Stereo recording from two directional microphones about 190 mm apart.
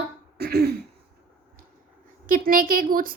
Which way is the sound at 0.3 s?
55° right (ahead or behind).